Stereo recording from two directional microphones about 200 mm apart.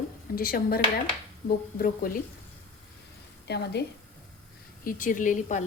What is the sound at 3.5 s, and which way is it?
Speech, 55° left (ahead or behind).